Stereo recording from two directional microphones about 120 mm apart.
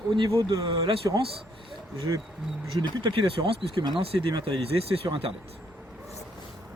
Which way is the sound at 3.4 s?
50° right (ahead or behind).